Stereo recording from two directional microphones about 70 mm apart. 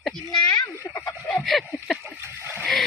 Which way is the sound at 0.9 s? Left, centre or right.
Left.